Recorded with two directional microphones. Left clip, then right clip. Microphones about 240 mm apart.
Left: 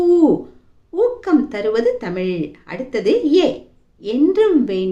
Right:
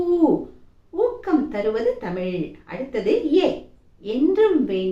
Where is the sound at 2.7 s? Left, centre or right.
Left.